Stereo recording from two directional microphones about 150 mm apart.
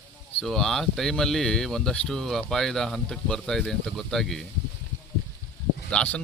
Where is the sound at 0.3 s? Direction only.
5° left (ahead or behind).